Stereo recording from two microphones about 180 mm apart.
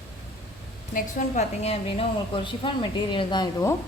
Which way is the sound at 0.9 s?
40° left (ahead or behind).